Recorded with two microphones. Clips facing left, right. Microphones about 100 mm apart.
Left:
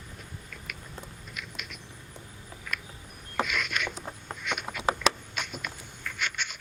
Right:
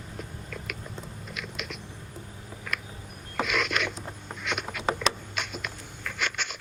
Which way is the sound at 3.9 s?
5° left (ahead or behind).